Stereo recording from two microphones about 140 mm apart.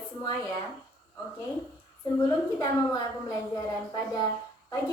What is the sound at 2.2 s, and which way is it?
A woman's voice, 25° left (ahead or behind).